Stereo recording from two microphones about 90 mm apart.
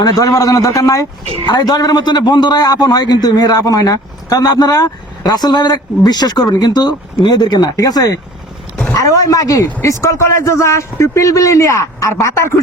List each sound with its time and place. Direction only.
0.0 s a man's voice: 40° left (ahead or behind)